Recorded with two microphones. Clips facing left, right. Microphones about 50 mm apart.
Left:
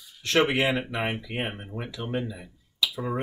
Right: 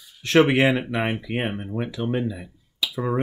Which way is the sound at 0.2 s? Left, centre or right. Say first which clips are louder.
Right 6 dB; right.